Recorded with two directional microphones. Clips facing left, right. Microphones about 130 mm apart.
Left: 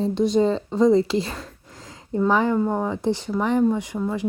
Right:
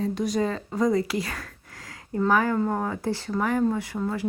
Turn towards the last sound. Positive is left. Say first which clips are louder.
# left 3 dB
turn(degrees=15)  # may be behind; listen again after turning